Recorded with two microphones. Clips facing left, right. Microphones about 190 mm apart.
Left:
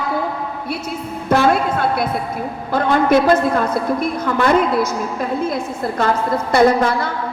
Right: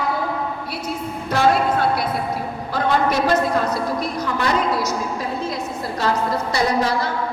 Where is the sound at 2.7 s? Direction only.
55° left (ahead or behind).